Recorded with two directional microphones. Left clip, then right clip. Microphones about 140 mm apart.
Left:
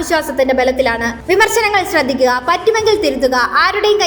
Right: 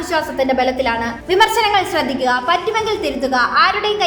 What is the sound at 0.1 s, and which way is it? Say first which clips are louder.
A woman's voice: left 3 dB; 35° left (ahead or behind).